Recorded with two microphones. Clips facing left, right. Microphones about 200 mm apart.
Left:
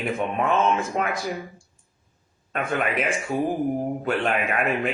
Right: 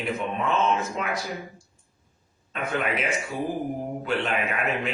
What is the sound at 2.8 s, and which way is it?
Speech, 50° left (ahead or behind).